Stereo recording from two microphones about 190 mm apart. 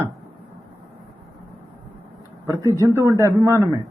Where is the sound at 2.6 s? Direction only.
15° right (ahead or behind).